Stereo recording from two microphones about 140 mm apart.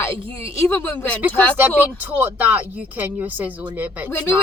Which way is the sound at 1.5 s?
15° right (ahead or behind).